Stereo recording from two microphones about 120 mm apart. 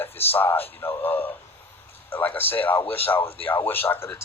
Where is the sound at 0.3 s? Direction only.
15° left (ahead or behind).